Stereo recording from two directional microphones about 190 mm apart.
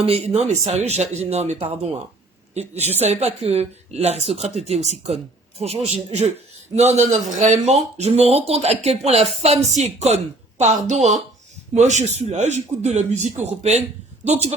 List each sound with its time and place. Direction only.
0.0 s speech: 30° right (ahead or behind)